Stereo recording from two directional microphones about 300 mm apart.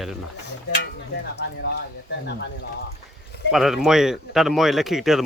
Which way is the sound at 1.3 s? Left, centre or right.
Left.